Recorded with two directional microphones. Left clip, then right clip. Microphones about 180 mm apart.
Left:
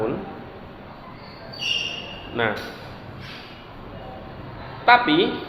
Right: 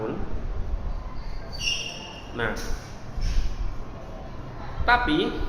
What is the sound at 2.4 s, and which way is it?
Speech, 15° left (ahead or behind).